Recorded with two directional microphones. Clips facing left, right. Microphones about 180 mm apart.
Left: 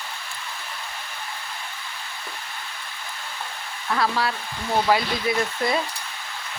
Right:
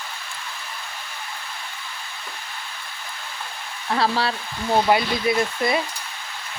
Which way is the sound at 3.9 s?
30° right (ahead or behind).